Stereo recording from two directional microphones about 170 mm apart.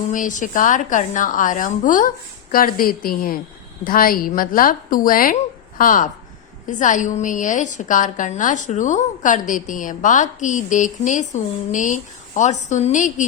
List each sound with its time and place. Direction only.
0.1 s a woman's voice: 50° left (ahead or behind)